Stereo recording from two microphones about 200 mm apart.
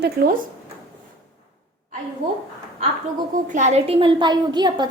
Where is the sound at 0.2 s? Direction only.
45° right (ahead or behind).